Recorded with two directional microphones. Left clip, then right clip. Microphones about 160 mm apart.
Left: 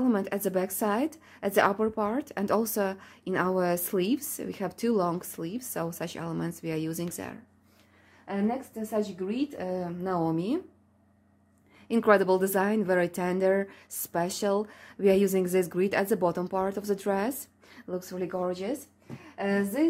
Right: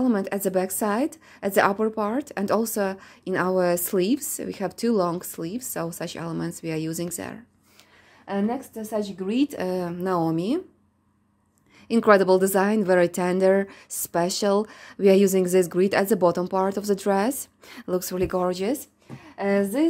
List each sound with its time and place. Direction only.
0.0 s a woman's voice: 20° right (ahead or behind)
8.3 s speech: 55° right (ahead or behind)
9.3 s speech: 90° right; by 10.6 s 35° right (ahead or behind)
11.9 s a woman's voice: 25° right (ahead or behind)
17.6 s speech: 55° right (ahead or behind); by 18.8 s 90° right
19.3 s speech: 45° right (ahead or behind)